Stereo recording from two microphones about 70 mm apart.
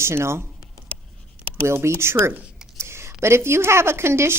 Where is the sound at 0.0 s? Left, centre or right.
Right.